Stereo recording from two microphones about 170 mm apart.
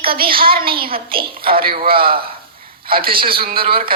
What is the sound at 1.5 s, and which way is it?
Speech, 60° right (ahead or behind).